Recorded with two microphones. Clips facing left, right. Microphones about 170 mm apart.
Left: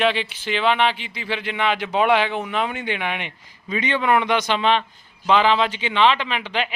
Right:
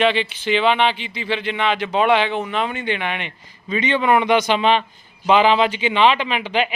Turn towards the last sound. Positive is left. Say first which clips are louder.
# right 4 dB
turn(degrees=-5)  # may be behind; listen again after turning